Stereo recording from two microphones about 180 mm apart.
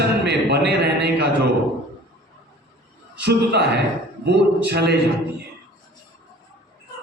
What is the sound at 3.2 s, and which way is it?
A man's voice, 65° right (ahead or behind).